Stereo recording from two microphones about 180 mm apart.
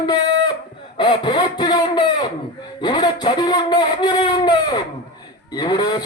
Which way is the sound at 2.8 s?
25° left (ahead or behind).